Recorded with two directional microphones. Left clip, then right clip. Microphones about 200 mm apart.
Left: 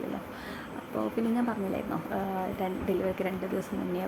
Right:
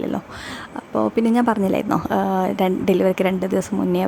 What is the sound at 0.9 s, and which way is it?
A woman's voice, 50° right (ahead or behind).